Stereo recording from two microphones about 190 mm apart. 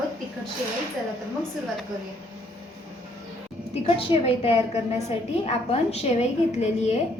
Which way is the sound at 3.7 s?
30° left (ahead or behind).